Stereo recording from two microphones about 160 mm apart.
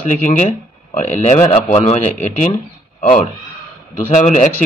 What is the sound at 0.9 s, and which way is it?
Speech, 45° left (ahead or behind).